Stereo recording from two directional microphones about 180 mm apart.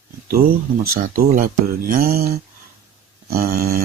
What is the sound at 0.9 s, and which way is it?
Speech, 50° right (ahead or behind).